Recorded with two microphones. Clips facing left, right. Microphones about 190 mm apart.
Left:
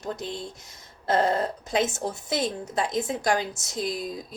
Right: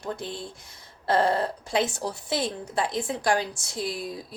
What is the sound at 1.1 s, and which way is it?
A woman's voice, 20° left (ahead or behind).